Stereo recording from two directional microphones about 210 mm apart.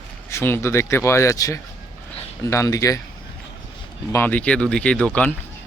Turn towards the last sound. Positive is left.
turn(degrees=5)  # may be behind; listen again after turning